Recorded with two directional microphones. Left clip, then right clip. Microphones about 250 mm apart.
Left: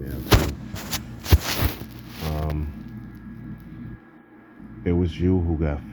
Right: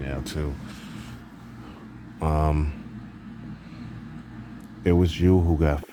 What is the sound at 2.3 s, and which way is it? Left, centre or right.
Speech, right.